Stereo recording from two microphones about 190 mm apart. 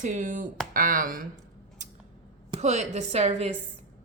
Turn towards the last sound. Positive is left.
turn(degrees=-35)  # may be behind; listen again after turning